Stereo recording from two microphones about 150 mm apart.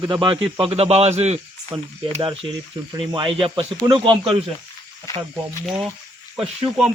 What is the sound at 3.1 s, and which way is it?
Speech, 35° right (ahead or behind).